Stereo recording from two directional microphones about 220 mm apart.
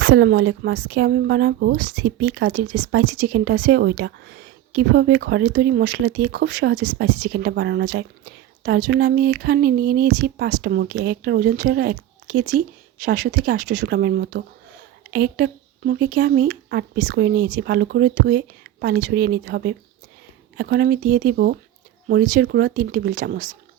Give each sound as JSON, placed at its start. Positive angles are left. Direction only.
{"t": 0.0, "sound": "speech", "side_deg": -50}